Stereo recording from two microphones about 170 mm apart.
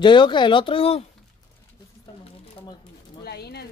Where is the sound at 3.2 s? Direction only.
70° left (ahead or behind).